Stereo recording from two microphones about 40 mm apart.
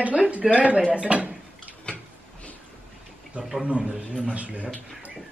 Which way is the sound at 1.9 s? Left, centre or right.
Left.